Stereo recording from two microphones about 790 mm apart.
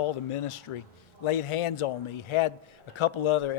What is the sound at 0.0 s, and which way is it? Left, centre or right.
A man's voice, left.